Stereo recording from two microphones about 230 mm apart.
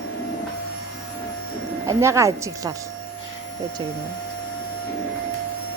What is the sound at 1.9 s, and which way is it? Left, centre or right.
Speech, centre.